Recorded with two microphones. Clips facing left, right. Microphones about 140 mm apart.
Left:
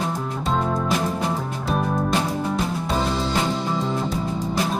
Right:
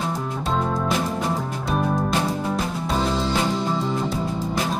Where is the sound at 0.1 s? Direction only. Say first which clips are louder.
Even; centre (ahead or behind).